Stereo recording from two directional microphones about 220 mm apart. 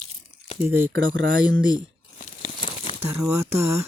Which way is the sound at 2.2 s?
35° left (ahead or behind).